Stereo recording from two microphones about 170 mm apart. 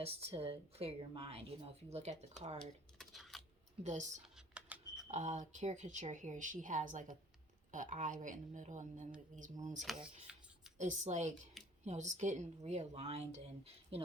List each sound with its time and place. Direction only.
0.0 s a woman's voice: 35° right (ahead or behind)
2.6 s typing: centre (ahead or behind)
3.8 s speech: 45° right (ahead or behind)
4.4 s typing: 5° right (ahead or behind)
5.0 s speech: 45° right (ahead or behind)
9.9 s speech: centre (ahead or behind)
10.8 s a woman's voice: 45° right (ahead or behind)